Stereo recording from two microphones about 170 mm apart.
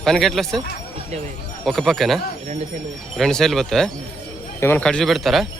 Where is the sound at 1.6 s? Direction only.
Centre (ahead or behind).